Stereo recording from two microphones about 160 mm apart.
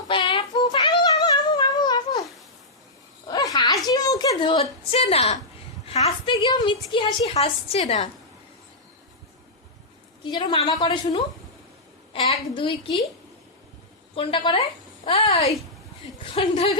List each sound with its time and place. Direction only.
0.1 s child singing: 30° left (ahead or behind)
3.2 s a sound: 25° left (ahead or behind)
6.4 s a woman's voice: 30° left (ahead or behind)
10.2 s a woman's voice: 30° left (ahead or behind)
14.2 s a woman's voice: 35° left (ahead or behind)